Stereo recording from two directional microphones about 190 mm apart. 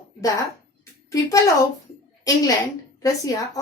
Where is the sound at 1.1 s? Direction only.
20° left (ahead or behind).